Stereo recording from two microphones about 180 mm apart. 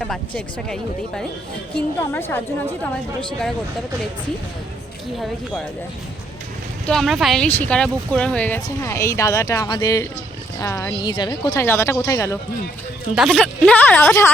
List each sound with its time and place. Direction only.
0.0 s speech: 5° left (ahead or behind)
5.1 s speech: centre (ahead or behind)
6.8 s speech: centre (ahead or behind)
13.1 s speech: 5° left (ahead or behind)